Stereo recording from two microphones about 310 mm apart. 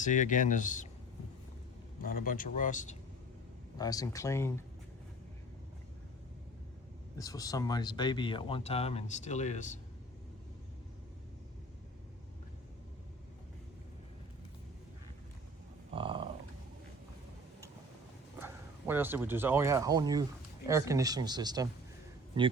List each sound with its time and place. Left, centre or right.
0.0 s speech: left
2.0 s speech: left
3.8 s speech: centre
7.2 s speech: centre
15.9 s a sound: centre
18.3 s speech: centre